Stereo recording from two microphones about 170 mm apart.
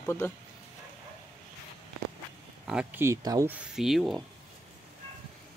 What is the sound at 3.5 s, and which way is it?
Speech, 5° right (ahead or behind).